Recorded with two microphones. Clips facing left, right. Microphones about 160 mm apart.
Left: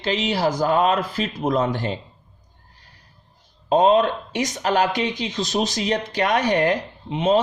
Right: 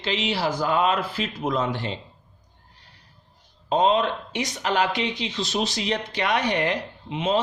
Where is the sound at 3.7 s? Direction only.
45° left (ahead or behind).